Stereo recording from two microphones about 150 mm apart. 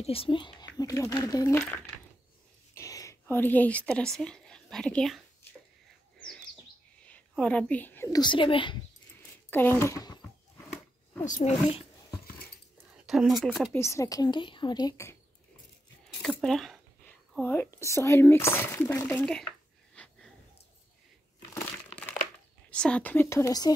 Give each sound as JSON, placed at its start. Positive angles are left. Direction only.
{"t": 0.0, "sound": "speech", "side_deg": 40}
{"t": 2.7, "sound": "a woman's voice", "side_deg": 20}
{"t": 6.1, "sound": "bird", "side_deg": 5}
{"t": 7.0, "sound": "whispering", "side_deg": 10}
{"t": 8.2, "sound": "speech", "side_deg": 35}
{"t": 9.5, "sound": "speech", "side_deg": 15}
{"t": 11.2, "sound": "speech", "side_deg": 55}
{"t": 12.9, "sound": "speech", "side_deg": -5}
{"t": 13.7, "sound": "speech", "side_deg": 20}
{"t": 16.2, "sound": "speech", "side_deg": 0}
{"t": 17.4, "sound": "speech", "side_deg": 15}
{"t": 19.9, "sound": "wheeze", "side_deg": 5}
{"t": 21.9, "sound": "crumpling", "side_deg": 10}
{"t": 22.7, "sound": "speech", "side_deg": 5}